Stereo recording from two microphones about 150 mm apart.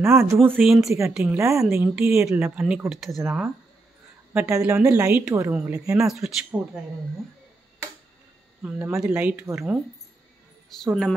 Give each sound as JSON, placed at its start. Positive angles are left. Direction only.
{"t": 0.0, "sound": "speech", "side_deg": -15}
{"t": 0.6, "sound": "speech", "side_deg": 0}
{"t": 1.4, "sound": "a woman's voice", "side_deg": -20}
{"t": 5.9, "sound": "speech", "side_deg": 0}
{"t": 8.6, "sound": "speech", "side_deg": -10}
{"t": 10.8, "sound": "speech", "side_deg": 0}